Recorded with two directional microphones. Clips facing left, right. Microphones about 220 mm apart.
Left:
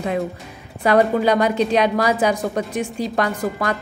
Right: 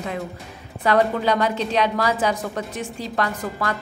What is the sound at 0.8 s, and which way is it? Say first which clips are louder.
A woman's voice: left 3 dB; 10° left (ahead or behind).